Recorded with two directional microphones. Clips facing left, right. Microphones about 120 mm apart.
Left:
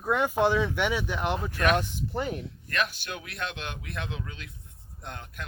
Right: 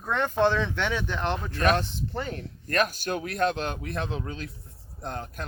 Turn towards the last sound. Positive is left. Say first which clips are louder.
# right 6 dB
turn(degrees=-35)  # may be behind; listen again after turning